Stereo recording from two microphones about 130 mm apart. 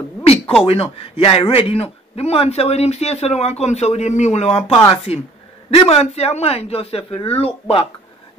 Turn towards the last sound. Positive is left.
turn(degrees=50)  # may be behind; listen again after turning